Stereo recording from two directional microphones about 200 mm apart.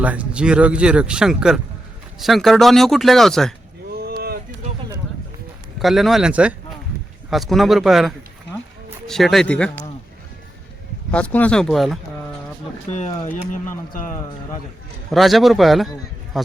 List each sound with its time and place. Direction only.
0.0 s speech: 5° right (ahead or behind)
3.9 s a sound: 50° right (ahead or behind)
5.8 s speech: centre (ahead or behind)
11.1 s speech: 5° left (ahead or behind)
12.9 s speech: 35° left (ahead or behind)
15.1 s a man's voice: centre (ahead or behind)